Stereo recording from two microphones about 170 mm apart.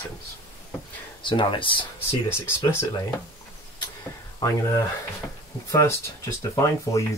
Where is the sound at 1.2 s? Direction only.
30° left (ahead or behind).